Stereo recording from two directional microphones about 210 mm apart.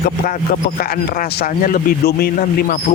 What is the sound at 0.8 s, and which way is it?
Speech, 40° left (ahead or behind).